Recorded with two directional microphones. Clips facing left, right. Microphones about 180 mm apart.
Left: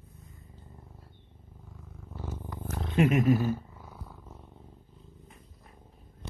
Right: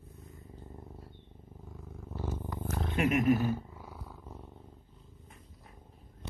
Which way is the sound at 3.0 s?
25° left (ahead or behind).